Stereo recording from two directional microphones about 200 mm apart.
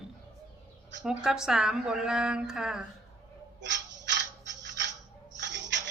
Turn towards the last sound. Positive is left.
turn(degrees=-60)  # may be behind; listen again after turning